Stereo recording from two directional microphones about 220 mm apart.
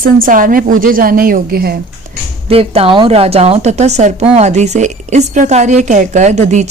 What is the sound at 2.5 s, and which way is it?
A woman's voice, 25° right (ahead or behind).